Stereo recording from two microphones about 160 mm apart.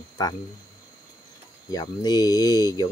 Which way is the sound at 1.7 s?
25° left (ahead or behind).